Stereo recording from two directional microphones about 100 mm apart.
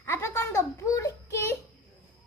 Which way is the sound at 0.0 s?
25° left (ahead or behind).